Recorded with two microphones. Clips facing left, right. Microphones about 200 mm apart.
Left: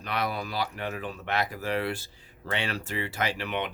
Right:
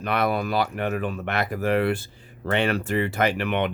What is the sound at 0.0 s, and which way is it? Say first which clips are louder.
Speech: right 7 dB; 55° right (ahead or behind).